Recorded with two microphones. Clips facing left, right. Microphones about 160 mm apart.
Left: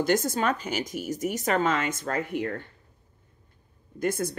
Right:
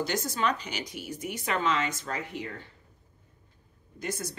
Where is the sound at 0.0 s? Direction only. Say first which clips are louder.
Left 5 dB; 50° left (ahead or behind).